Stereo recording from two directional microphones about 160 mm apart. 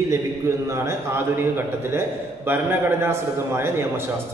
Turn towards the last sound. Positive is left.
turn(degrees=-15)  # may be behind; listen again after turning